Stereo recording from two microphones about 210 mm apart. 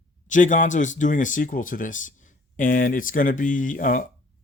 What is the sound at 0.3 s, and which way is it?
Speech, 35° left (ahead or behind).